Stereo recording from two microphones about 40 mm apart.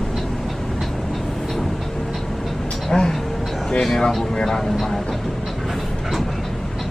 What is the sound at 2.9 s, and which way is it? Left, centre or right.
Speech, centre.